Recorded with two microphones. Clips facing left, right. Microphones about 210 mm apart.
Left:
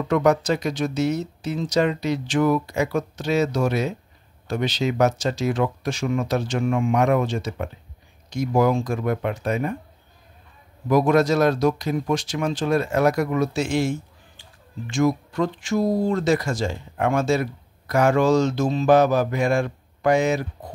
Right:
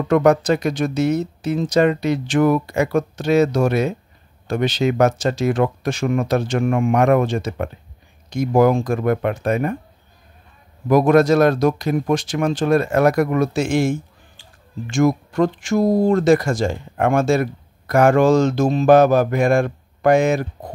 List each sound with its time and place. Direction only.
0.1 s speech: 55° right (ahead or behind)
10.9 s speech: 55° right (ahead or behind)